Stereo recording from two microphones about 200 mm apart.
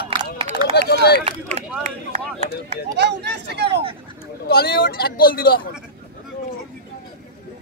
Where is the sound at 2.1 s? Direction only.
35° right (ahead or behind).